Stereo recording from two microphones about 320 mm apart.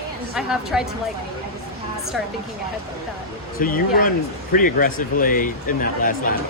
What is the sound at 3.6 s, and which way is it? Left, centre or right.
Speech, left.